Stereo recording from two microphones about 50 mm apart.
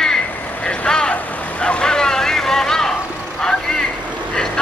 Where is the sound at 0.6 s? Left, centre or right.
Centre.